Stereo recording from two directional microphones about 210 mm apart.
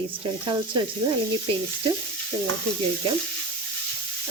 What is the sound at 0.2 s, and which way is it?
Speech, 20° right (ahead or behind).